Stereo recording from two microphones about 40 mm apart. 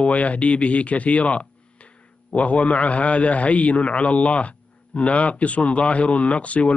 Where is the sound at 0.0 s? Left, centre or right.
Left.